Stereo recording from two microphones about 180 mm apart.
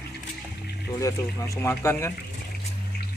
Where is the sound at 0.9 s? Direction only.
15° left (ahead or behind).